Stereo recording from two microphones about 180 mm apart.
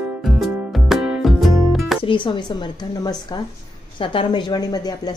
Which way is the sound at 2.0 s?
30° left (ahead or behind).